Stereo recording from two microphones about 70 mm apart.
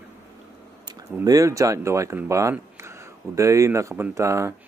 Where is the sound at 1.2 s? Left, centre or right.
Right.